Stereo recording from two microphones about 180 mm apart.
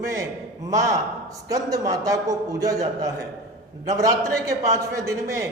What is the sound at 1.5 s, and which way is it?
A man's voice, 20° right (ahead or behind).